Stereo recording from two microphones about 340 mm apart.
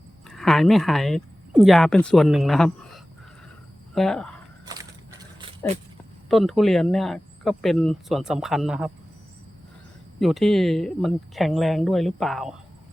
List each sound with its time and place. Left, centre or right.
0.3 s speech: centre
4.6 s crushing: centre
5.4 s dog: centre
6.2 s speech: centre
10.2 s speech: centre